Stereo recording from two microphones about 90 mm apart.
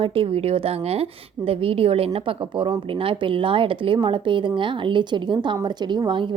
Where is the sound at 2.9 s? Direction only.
85° right.